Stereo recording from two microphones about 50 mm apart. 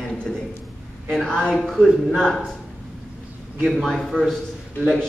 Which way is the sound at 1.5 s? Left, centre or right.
Centre.